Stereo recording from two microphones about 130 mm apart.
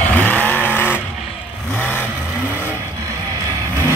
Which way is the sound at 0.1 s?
10° left (ahead or behind).